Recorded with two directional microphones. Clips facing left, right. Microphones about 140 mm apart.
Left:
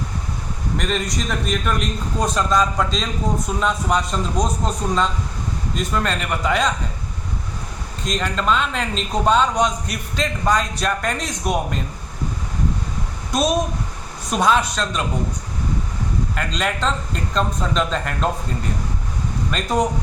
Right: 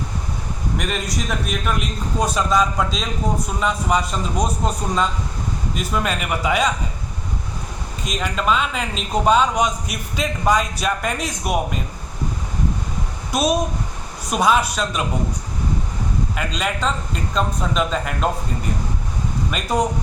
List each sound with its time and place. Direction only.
0.8 s a man's voice: 5° right (ahead or behind)
8.0 s a man's voice: 5° right (ahead or behind)
14.3 s a man's voice: 5° right (ahead or behind)
16.3 s a man's voice: 5° right (ahead or behind)
19.5 s a man's voice: 5° right (ahead or behind)